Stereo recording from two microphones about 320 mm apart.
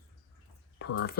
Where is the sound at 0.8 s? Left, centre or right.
Left.